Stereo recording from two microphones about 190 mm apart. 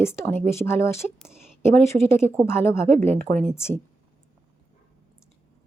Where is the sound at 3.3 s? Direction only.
40° right (ahead or behind).